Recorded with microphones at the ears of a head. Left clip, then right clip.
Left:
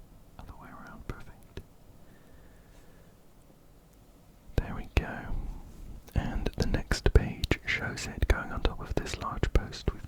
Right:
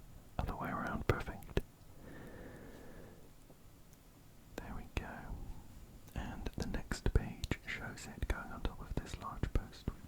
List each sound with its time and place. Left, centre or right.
0.3 s whispering: right
2.0 s a sound: right
4.5 s whispering: left